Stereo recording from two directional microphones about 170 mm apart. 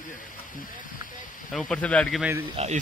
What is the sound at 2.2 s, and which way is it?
Speech, 10° right (ahead or behind).